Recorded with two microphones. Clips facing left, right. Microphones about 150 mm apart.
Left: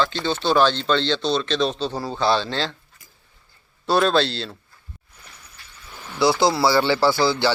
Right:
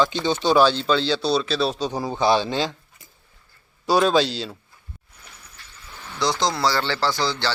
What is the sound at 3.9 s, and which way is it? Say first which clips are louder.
Speech: even; 10° right (ahead or behind).